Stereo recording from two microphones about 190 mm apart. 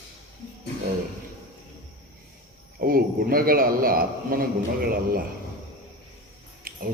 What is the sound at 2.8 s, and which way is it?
A man's voice, 50° right (ahead or behind).